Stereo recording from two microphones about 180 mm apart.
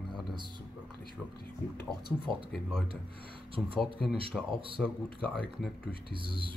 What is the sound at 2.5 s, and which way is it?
Speech, centre (ahead or behind).